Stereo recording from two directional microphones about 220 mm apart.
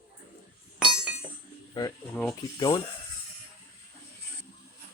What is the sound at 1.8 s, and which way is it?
Speech, 15° left (ahead or behind).